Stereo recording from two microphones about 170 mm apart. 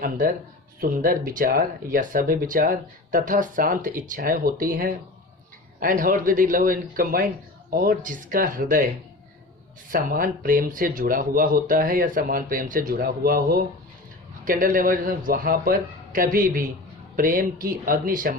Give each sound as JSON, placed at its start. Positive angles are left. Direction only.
{"t": 0.8, "sound": "speech", "side_deg": -55}
{"t": 9.9, "sound": "speech", "side_deg": -55}